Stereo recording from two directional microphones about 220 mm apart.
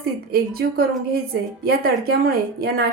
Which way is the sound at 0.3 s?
45° right (ahead or behind).